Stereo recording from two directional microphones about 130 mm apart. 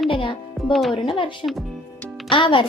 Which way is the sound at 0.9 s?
40° left (ahead or behind).